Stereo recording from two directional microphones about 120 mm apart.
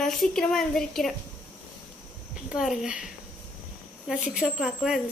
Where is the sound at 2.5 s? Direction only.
5° right (ahead or behind).